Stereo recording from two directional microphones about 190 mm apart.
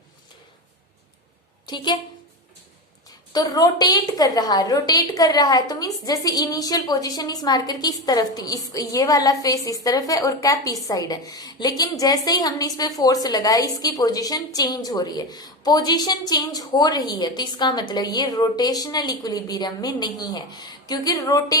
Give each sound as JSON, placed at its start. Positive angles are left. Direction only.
{"t": 1.6, "sound": "a woman's voice", "side_deg": 25}
{"t": 3.3, "sound": "a woman's voice", "side_deg": 20}